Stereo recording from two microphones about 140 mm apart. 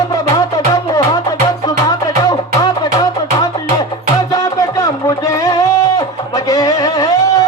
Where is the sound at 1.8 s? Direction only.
30° left (ahead or behind).